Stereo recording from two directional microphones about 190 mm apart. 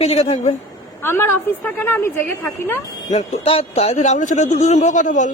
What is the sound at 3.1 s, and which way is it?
Speech, 30° left (ahead or behind).